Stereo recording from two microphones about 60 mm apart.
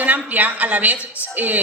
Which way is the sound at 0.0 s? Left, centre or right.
Right.